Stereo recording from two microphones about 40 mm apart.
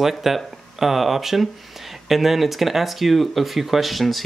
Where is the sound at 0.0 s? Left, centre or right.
Centre.